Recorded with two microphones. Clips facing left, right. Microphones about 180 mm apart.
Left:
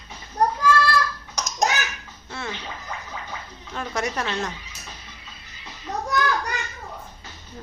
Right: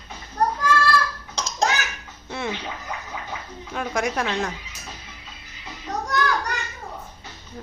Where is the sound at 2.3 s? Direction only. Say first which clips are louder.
Right 4 dB; 20° right (ahead or behind).